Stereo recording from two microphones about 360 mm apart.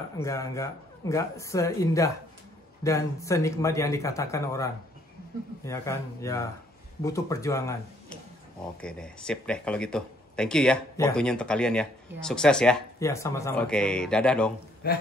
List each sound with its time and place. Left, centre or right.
0.2 s speech: centre
5.7 s speech: centre
14.8 s a man's voice: left